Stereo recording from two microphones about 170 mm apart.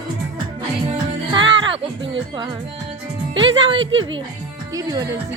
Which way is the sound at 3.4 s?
30° right (ahead or behind).